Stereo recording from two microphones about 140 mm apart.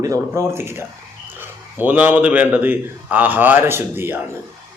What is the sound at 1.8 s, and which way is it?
A man's voice, 10° right (ahead or behind).